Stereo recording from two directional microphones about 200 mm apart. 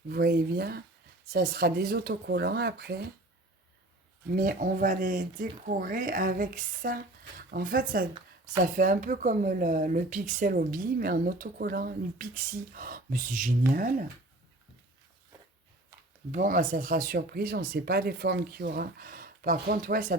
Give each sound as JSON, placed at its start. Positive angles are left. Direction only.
{"t": 0.1, "sound": "speech", "side_deg": -50}
{"t": 4.3, "sound": "speech", "side_deg": -45}
{"t": 16.3, "sound": "speech", "side_deg": -40}